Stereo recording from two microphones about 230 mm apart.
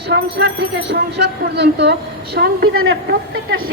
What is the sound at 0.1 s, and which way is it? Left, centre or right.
A man's voice, right.